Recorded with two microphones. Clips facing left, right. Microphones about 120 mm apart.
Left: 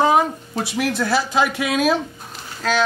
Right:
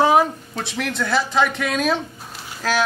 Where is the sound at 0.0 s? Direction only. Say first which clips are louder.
Right 1 dB; 5° right (ahead or behind).